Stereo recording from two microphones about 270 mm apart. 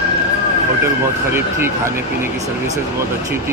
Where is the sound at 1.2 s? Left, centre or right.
Centre.